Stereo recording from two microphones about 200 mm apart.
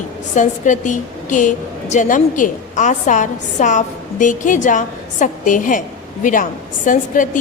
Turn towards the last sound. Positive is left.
turn(degrees=40)  # may be behind; listen again after turning